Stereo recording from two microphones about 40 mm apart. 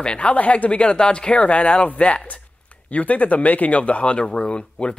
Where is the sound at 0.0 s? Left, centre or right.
Left.